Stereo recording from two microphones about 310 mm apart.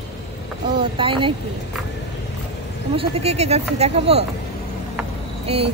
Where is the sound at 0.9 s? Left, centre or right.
Centre.